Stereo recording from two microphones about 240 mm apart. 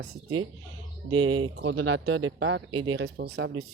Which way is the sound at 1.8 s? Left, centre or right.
Right.